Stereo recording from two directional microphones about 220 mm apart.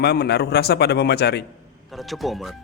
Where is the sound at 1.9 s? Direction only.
Centre (ahead or behind).